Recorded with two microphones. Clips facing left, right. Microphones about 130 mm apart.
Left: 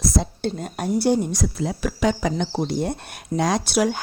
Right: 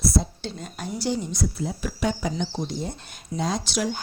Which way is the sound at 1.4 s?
85° left.